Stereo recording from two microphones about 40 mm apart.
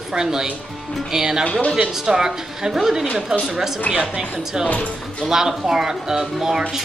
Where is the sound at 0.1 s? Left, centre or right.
Centre.